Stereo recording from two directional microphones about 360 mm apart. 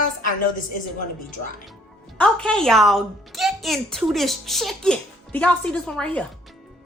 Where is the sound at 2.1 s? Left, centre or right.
Centre.